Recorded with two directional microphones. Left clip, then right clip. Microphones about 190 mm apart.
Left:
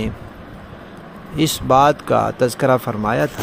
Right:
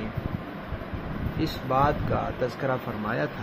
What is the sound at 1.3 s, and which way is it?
Speech, 65° left (ahead or behind).